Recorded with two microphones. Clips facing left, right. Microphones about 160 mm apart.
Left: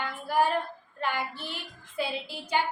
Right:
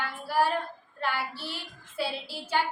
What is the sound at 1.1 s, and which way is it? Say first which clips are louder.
Speech: left 1 dB; 5° right (ahead or behind).